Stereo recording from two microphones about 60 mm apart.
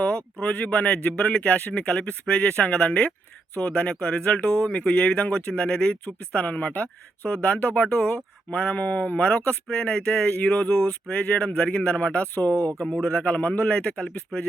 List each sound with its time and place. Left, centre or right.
0.0 s speech: centre
12.8 s speech: centre